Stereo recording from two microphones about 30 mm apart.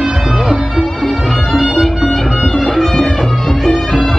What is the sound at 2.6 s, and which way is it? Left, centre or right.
Music, centre.